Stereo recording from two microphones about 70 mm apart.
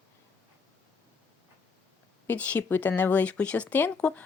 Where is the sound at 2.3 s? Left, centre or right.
Left.